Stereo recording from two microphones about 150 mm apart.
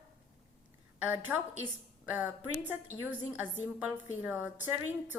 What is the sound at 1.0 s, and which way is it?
Speech, 10° right (ahead or behind).